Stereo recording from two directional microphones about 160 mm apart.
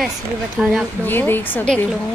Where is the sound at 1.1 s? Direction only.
10° left (ahead or behind).